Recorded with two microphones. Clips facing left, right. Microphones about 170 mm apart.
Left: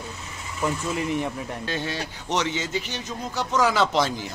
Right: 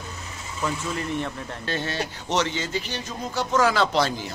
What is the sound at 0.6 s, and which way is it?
Speech, 15° left (ahead or behind).